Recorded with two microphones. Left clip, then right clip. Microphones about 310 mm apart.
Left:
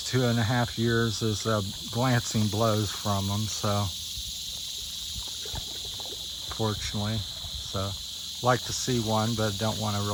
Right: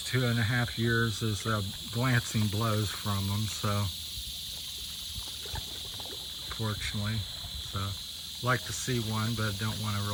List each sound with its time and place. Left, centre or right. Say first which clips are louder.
0.1 s cricket: left 4 dB; centre
6.6 s cricket: left 6 dB; centre
8.4 s cricket: left 5 dB; centre